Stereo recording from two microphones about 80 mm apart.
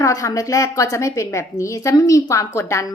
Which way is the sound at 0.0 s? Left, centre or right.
Left.